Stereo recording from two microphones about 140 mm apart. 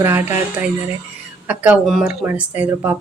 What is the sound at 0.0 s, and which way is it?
Speech, 15° right (ahead or behind).